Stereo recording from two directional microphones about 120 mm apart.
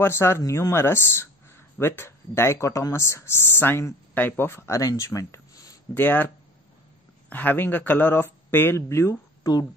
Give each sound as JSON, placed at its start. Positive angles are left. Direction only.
{"t": 0.0, "sound": "speech", "side_deg": 20}
{"t": 5.9, "sound": "speech", "side_deg": 15}